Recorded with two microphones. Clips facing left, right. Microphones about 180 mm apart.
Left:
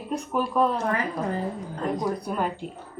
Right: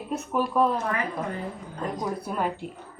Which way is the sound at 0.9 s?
30° left (ahead or behind).